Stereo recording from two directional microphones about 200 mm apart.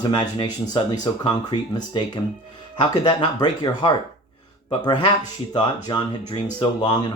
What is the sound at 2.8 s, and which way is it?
Speech, 25° left (ahead or behind).